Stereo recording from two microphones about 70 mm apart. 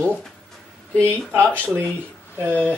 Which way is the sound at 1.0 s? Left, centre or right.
Right.